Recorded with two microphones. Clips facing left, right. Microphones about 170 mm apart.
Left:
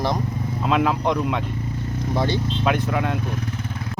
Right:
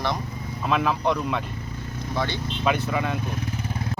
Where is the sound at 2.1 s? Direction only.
35° left (ahead or behind).